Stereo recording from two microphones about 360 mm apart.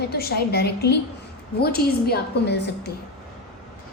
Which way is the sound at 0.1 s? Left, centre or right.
Left.